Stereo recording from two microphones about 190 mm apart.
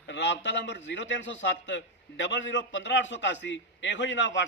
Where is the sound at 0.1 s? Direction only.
65° left (ahead or behind).